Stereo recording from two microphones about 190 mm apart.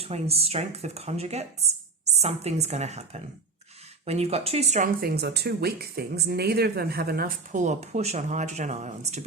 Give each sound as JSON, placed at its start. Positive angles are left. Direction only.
{"t": 0.0, "sound": "speech", "side_deg": -30}
{"t": 4.9, "sound": "speech", "side_deg": -55}